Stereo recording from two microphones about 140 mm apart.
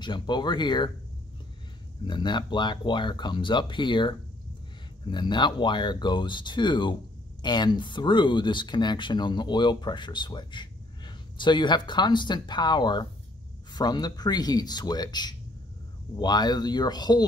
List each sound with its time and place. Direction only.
0.0 s speech: 30° left (ahead or behind)
2.0 s speech: 30° left (ahead or behind)